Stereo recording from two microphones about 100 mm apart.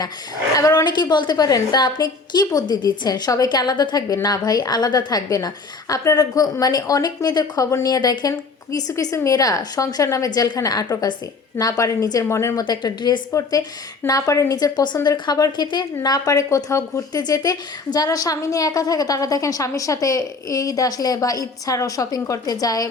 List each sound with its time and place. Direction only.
0.5 s a woman's voice: 35° left (ahead or behind)
12.6 s a woman's voice: 45° left (ahead or behind)